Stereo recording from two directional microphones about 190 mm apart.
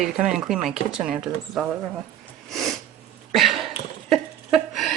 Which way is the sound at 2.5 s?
Centre (ahead or behind).